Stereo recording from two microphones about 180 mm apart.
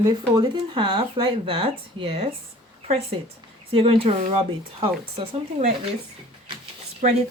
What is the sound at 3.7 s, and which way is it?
Speech, 30° right (ahead or behind).